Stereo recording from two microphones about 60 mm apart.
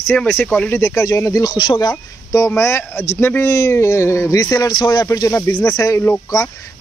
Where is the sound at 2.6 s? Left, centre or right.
Left.